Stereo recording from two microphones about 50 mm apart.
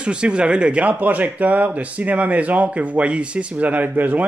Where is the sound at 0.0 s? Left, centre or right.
Right.